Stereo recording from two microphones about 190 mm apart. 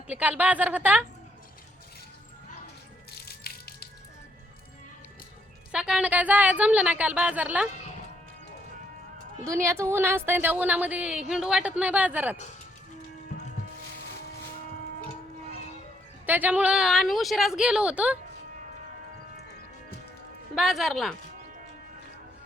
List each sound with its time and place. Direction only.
0.1 s a woman's voice: 10° right (ahead or behind)
3.1 s music: 55° left (ahead or behind)
5.7 s a woman's voice: 5° right (ahead or behind)
9.5 s a woman's voice: 15° right (ahead or behind)
16.2 s speech: 10° right (ahead or behind)
20.6 s speech: centre (ahead or behind)